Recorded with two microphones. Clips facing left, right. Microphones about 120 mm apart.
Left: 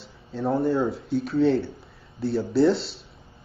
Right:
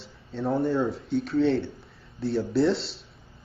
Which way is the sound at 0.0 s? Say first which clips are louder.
Left 2 dB; centre (ahead or behind).